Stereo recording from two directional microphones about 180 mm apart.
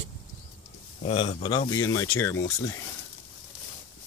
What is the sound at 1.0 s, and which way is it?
Speech, 30° left (ahead or behind).